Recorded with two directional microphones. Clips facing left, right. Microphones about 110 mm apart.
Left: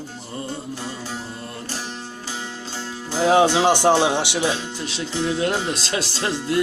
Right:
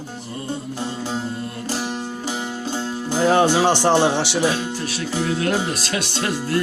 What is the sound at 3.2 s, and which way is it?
Music, 15° left (ahead or behind).